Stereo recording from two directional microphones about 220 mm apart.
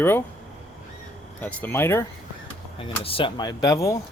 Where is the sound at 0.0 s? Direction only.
10° left (ahead or behind).